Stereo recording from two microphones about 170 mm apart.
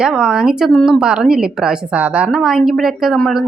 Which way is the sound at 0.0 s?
5° right (ahead or behind).